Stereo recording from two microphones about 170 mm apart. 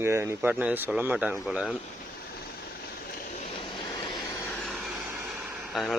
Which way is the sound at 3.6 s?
30° left (ahead or behind).